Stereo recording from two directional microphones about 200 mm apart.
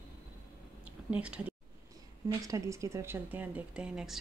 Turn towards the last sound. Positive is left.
turn(degrees=-5)  # may be behind; listen again after turning